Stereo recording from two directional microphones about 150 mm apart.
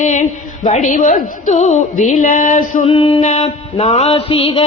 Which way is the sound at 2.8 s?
35° left (ahead or behind).